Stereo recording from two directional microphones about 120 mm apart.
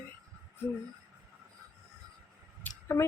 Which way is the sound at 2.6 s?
10° left (ahead or behind).